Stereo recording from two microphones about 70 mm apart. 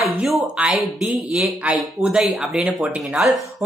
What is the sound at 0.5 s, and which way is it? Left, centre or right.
Speech, centre.